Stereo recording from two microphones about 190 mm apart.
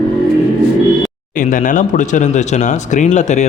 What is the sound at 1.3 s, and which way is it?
Speech, 45° left (ahead or behind).